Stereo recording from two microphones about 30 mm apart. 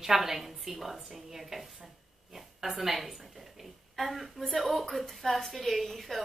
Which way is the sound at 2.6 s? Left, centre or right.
Centre.